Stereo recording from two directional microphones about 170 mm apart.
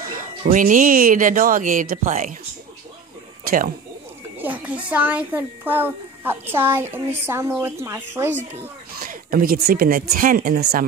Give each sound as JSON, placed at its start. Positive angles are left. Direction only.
{"t": 0.0, "sound": "speech", "side_deg": -50}
{"t": 3.4, "sound": "speech", "side_deg": -55}
{"t": 4.4, "sound": "a child's voice", "side_deg": -10}
{"t": 9.0, "sound": "speech", "side_deg": -60}